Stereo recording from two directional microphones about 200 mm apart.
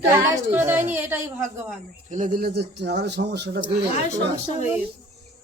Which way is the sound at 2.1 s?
40° right (ahead or behind).